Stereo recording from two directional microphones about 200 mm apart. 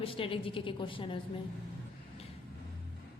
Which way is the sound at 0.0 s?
25° left (ahead or behind).